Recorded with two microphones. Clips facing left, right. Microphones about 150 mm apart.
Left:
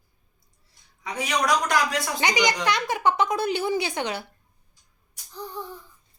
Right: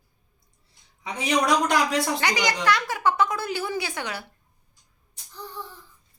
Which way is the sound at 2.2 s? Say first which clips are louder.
Left 1 dB; 15° left (ahead or behind).